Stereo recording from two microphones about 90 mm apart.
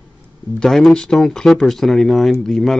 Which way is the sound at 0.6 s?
Centre (ahead or behind).